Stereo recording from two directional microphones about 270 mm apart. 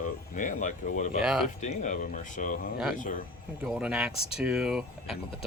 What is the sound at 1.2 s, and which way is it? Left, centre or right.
Speech, centre.